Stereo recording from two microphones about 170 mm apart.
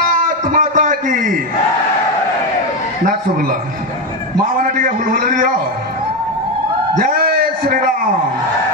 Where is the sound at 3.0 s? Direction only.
55° right (ahead or behind).